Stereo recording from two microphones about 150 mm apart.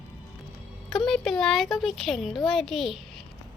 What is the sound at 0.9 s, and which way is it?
Speech, 5° left (ahead or behind).